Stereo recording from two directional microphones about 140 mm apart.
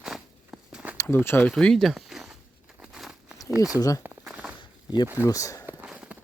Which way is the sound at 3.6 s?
25° left (ahead or behind).